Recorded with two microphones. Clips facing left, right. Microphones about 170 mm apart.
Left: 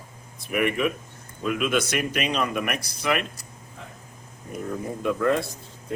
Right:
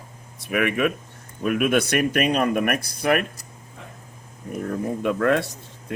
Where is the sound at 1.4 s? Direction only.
55° right (ahead or behind).